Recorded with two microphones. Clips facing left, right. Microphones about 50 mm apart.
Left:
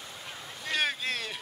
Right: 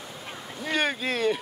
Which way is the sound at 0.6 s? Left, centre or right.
Centre.